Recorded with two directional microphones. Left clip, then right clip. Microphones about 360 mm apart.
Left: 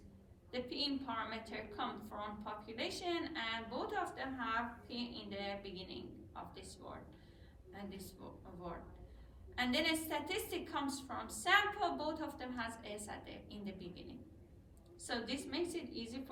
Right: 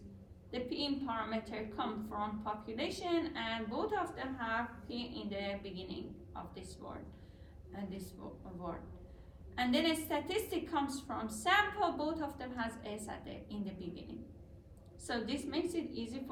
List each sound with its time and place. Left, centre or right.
0.5 s a woman's voice: centre
9.6 s a woman's voice: centre
15.0 s a woman's voice: centre